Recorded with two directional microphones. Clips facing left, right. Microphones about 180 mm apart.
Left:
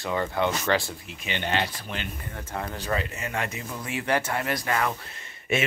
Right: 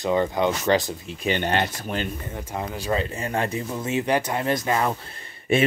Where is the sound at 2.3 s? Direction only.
15° right (ahead or behind).